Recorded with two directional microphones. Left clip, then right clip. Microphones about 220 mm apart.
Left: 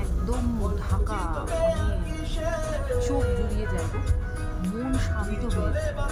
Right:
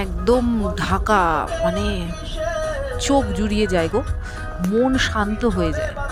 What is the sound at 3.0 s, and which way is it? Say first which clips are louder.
Speech: right 8 dB; 30° right (ahead or behind).